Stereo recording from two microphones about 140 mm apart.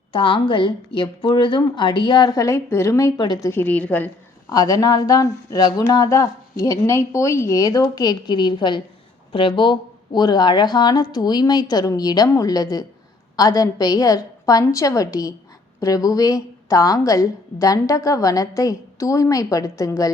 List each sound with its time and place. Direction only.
0.1 s a woman's voice: 35° left (ahead or behind)
3.5 s a woman's voice: 10° left (ahead or behind)
4.5 s a woman's voice: 25° left (ahead or behind)